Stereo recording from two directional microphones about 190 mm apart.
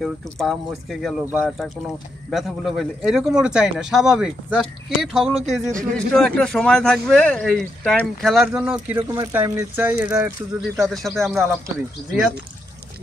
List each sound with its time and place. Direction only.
0.0 s speech: centre (ahead or behind)
2.3 s speech: centre (ahead or behind)
5.4 s speech: 45° right (ahead or behind)
5.9 s speech: 5° left (ahead or behind)
8.9 s speech: 20° right (ahead or behind)
10.8 s speech: centre (ahead or behind)
11.3 s speech: 15° right (ahead or behind)